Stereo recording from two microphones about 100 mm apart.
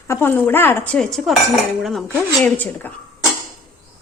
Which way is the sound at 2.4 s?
15° left (ahead or behind).